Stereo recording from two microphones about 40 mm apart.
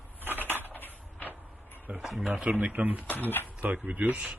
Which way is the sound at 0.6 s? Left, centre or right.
Left.